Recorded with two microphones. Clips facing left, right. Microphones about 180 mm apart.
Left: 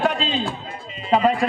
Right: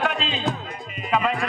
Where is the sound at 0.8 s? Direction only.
30° left (ahead or behind).